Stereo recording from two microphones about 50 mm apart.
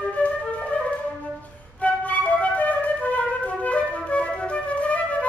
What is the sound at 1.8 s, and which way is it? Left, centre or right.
Flute, left.